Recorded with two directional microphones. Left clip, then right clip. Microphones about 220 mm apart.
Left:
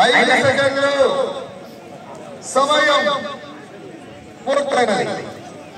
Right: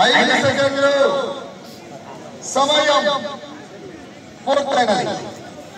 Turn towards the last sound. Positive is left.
turn(degrees=20)  # may be behind; listen again after turning